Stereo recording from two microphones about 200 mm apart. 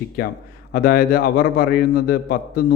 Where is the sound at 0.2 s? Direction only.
50° left (ahead or behind).